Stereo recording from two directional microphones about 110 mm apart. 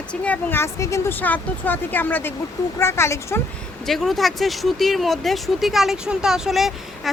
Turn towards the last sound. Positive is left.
turn(degrees=0)  # may be behind; listen again after turning